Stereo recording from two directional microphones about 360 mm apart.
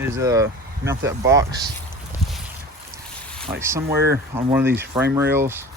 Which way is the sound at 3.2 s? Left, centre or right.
Centre.